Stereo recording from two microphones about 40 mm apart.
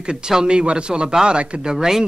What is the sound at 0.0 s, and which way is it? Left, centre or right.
A woman's voice, centre.